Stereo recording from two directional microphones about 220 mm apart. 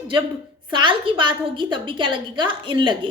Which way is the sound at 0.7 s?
20° right (ahead or behind).